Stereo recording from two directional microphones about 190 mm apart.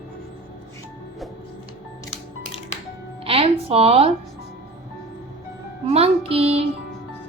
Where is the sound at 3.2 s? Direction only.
30° right (ahead or behind).